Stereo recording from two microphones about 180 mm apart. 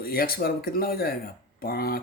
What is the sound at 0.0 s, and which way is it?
Speech, 55° left (ahead or behind).